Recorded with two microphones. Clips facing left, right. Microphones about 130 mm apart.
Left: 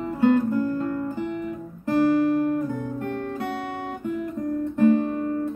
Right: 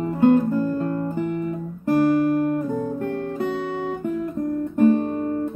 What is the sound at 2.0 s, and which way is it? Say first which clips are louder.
Guitar: right 1 dB; 45° right (ahead or behind).